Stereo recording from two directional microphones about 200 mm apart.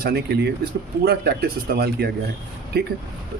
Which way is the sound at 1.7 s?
50° right (ahead or behind).